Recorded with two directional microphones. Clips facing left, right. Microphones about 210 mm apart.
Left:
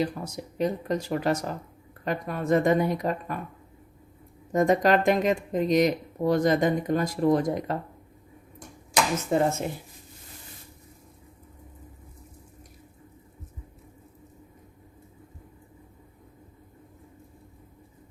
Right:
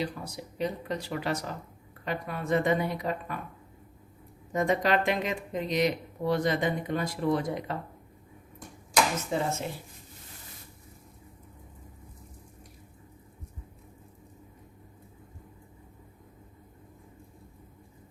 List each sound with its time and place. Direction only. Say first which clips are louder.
0.0 s speech: left 5 dB; 45° left (ahead or behind)
4.5 s speech: left 5 dB; 45° left (ahead or behind)
9.3 s speech: left 8 dB; 50° left (ahead or behind)